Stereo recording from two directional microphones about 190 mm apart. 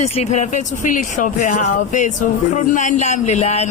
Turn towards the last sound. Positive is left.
turn(degrees=35)  # may be behind; listen again after turning